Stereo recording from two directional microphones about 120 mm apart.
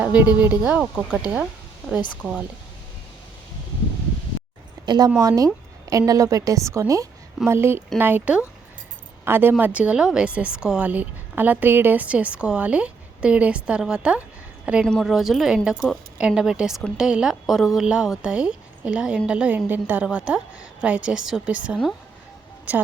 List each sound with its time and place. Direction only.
0.0 s a woman's voice: 15° right (ahead or behind)
4.9 s a woman's voice: 35° right (ahead or behind); by 22.8 s 15° right (ahead or behind)